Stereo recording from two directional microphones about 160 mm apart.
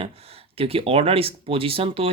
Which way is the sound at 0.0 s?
40° right (ahead or behind).